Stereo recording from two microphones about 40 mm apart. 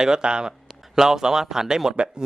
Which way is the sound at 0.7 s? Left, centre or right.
Centre.